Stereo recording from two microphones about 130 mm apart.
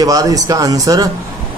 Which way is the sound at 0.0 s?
25° right (ahead or behind).